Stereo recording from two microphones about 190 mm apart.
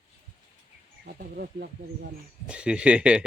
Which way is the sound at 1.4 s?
55° right (ahead or behind).